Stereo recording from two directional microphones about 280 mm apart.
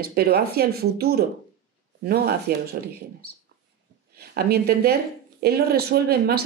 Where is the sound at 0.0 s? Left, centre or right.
Right.